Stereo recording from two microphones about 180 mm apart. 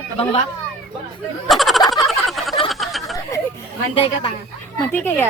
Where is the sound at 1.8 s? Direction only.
20° left (ahead or behind).